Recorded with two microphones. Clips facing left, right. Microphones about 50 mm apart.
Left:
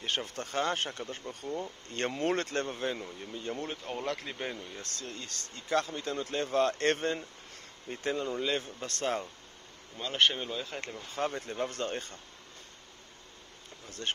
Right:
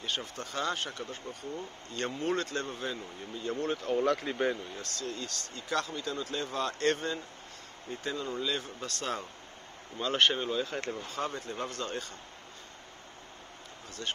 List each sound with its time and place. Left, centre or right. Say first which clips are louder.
0.0 s speech: left 2 dB; left
3.6 s speech: right 11 dB; centre
4.9 s speech: right 4 dB; left
6.0 s speech: left 2 dB; left
9.9 s speech: right 1 dB; centre
11.1 s speech: left 5 dB; left